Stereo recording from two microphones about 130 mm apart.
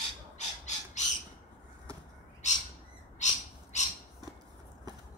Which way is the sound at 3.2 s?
65° left (ahead or behind).